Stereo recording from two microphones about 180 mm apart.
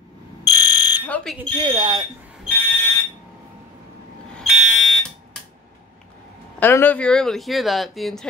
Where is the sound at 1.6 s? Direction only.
25° right (ahead or behind).